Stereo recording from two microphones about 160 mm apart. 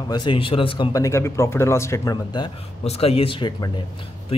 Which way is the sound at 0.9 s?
20° left (ahead or behind).